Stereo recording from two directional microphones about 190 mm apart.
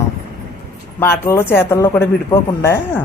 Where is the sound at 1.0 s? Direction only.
10° left (ahead or behind).